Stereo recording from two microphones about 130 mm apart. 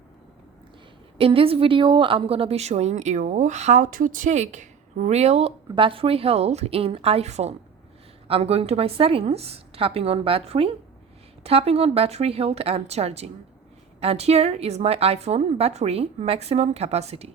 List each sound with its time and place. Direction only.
1.2 s a woman's voice: 45° right (ahead or behind)